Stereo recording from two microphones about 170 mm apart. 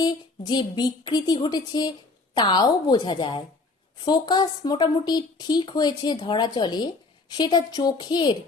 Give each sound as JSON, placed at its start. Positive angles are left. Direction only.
{"t": 0.0, "sound": "a woman's voice", "side_deg": 25}